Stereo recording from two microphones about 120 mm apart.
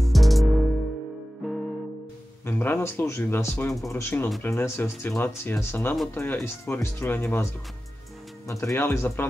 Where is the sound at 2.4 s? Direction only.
20° left (ahead or behind).